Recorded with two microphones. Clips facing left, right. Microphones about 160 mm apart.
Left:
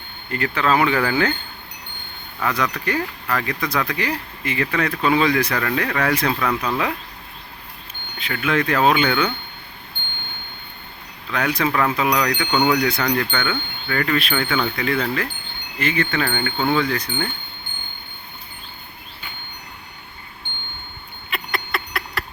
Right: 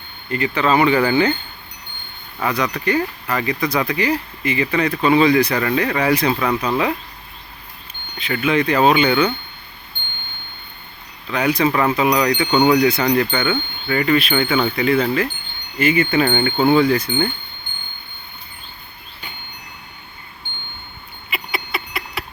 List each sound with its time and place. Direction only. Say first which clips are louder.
0.3 s speech: right 2 dB; centre (ahead or behind)
2.5 s speech: right 3 dB; centre (ahead or behind)
6.6 s wind chime: right 3 dB; 5° right (ahead or behind)
8.2 s speech: right 3 dB; centre (ahead or behind)
9.0 s wind chime: right 4 dB; 10° right (ahead or behind)
11.3 s speech: right 4 dB; centre (ahead or behind)
15.8 s wind chime: right 6 dB; 10° right (ahead or behind)
16.2 s wind chime: right 6 dB; 25° right (ahead or behind)
16.6 s wind chime: right 6 dB; 10° right (ahead or behind)
21.2 s a sound: even; centre (ahead or behind)